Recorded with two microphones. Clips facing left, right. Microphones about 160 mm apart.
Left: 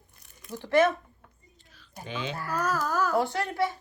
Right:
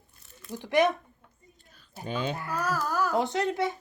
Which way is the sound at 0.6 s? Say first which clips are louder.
Left 1 dB; 15° right (ahead or behind).